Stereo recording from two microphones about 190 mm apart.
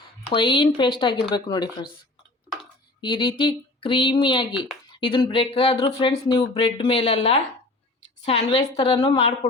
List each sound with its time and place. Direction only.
0.3 s speech: 25° left (ahead or behind)
3.0 s speech: 25° left (ahead or behind)